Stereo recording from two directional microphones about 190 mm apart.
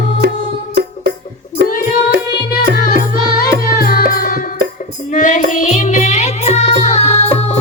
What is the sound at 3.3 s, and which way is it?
Music, 50° left (ahead or behind).